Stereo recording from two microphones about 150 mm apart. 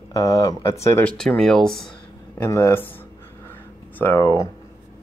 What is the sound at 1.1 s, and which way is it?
Speech, 5° left (ahead or behind).